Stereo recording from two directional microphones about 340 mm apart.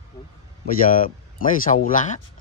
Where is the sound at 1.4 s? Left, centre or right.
Left.